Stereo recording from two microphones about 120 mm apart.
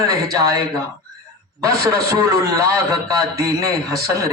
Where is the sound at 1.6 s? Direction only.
30° right (ahead or behind).